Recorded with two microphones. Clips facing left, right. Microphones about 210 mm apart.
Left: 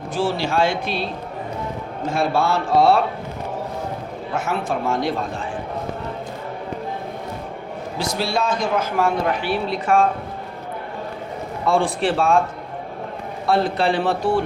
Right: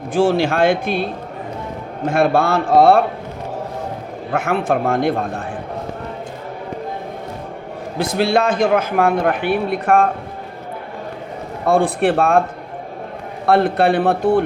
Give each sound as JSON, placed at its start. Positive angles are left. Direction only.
{"t": 0.1, "sound": "speech", "side_deg": -50}
{"t": 4.3, "sound": "a man's voice", "side_deg": -55}
{"t": 7.9, "sound": "a man's voice", "side_deg": -55}
{"t": 11.6, "sound": "a man's voice", "side_deg": -55}
{"t": 13.4, "sound": "a man's voice", "side_deg": -60}